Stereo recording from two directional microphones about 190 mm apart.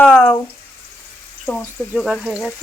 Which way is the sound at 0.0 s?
5° left (ahead or behind).